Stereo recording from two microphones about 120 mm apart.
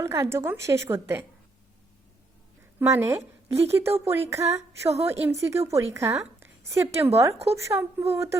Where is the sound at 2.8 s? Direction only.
20° right (ahead or behind).